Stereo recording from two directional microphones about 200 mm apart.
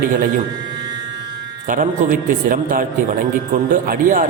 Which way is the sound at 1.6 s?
40° right (ahead or behind).